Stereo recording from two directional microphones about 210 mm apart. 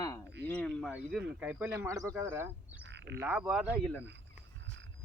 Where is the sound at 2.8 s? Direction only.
55° right (ahead or behind).